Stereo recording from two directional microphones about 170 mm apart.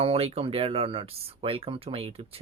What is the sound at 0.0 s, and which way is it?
Speech, 35° right (ahead or behind).